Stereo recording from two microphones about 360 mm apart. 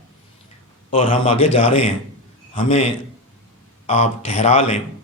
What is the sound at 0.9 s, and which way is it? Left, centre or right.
A man's voice, centre.